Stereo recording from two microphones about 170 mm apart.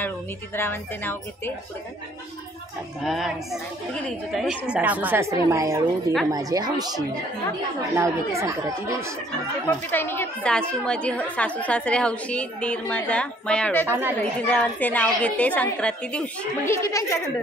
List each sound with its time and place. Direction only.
0.6 s a woman's voice: 15° left (ahead or behind)
3.0 s a woman's voice: centre (ahead or behind); by 6.9 s 20° right (ahead or behind)
7.9 s speech: 15° right (ahead or behind)
9.7 s a woman's voice: 10° left (ahead or behind)
13.8 s speech: 15° right (ahead or behind)
14.4 s a woman's voice: 10° left (ahead or behind)